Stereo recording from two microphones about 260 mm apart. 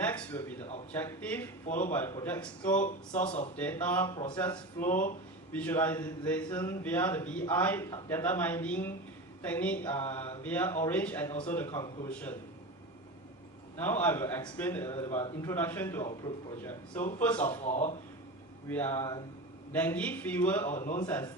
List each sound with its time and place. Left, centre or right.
0.0 s speech: centre
2.8 s speech: left
3.6 s speech: centre
4.9 s speech: left
5.5 s speech: centre
13.7 s speech: centre
17.6 s speech: left
18.7 s speech: centre
20.7 s speech: left